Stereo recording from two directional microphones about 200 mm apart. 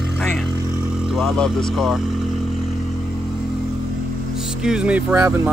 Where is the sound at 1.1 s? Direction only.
Centre (ahead or behind).